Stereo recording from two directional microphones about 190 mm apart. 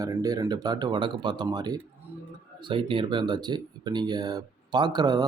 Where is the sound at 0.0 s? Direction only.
20° right (ahead or behind).